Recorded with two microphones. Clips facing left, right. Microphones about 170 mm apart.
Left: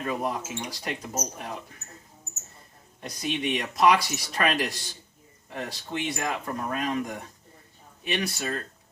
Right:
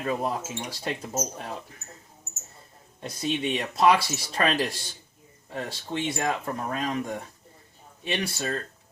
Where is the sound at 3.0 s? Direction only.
25° right (ahead or behind).